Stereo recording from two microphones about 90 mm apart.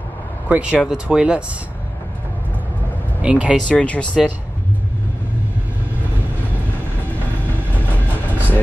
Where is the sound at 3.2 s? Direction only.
15° right (ahead or behind).